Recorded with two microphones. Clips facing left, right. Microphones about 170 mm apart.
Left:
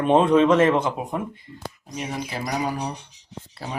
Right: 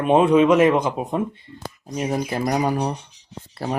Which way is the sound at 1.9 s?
40° right (ahead or behind).